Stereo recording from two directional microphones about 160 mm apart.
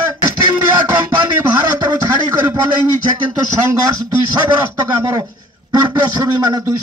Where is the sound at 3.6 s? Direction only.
20° right (ahead or behind).